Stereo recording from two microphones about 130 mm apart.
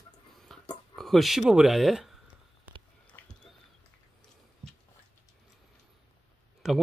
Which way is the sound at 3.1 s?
20° left (ahead or behind).